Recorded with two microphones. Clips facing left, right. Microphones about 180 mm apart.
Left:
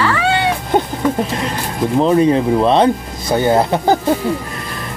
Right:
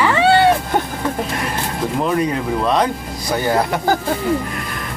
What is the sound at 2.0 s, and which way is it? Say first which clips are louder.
Speech: left 8 dB; 30° left (ahead or behind).